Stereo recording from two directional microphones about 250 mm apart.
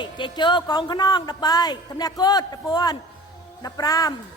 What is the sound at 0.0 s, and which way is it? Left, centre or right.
A man's voice, centre.